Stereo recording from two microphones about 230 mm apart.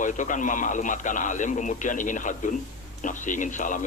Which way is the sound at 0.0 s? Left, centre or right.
Left.